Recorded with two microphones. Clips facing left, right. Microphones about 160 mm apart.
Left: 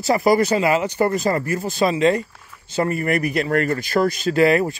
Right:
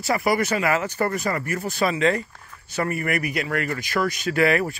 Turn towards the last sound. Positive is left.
turn(degrees=25)  # may be behind; listen again after turning